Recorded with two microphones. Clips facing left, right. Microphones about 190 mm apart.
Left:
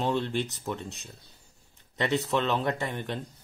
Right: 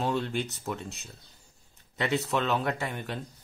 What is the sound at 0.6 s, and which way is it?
Speech, centre (ahead or behind).